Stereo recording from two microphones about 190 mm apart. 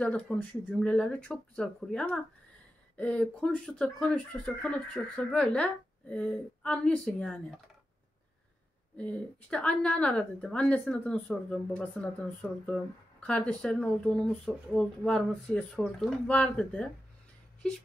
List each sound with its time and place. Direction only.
0.0 s speech: 5° left (ahead or behind)
8.9 s speech: 5° left (ahead or behind)